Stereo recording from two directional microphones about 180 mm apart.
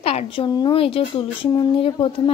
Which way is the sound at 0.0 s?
35° left (ahead or behind).